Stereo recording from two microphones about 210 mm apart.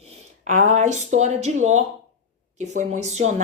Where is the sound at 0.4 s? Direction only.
35° right (ahead or behind).